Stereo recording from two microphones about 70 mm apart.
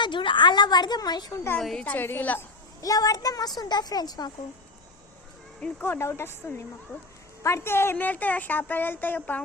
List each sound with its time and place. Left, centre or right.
0.0 s a woman's voice: left
1.8 s speech: left
2.8 s a woman's voice: left
5.8 s speech: left
7.4 s speech: left
7.9 s speech: left